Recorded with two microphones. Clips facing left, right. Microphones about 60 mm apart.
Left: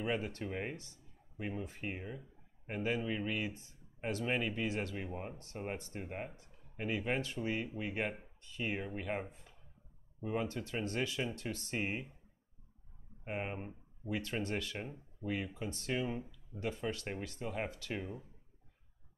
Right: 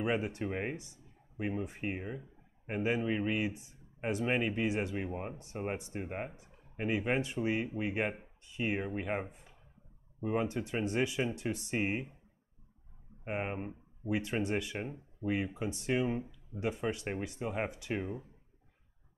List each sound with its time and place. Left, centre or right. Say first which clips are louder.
0.0 s speech: right 4 dB; centre
13.2 s speech: right 4 dB; right